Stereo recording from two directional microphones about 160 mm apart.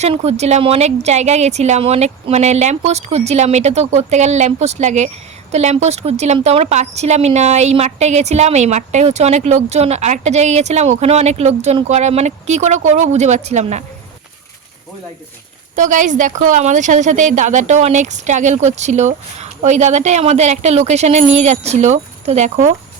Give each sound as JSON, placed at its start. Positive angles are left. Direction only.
{"t": 0.0, "sound": "a woman's voice", "side_deg": -40}
{"t": 15.7, "sound": "a woman's voice", "side_deg": -50}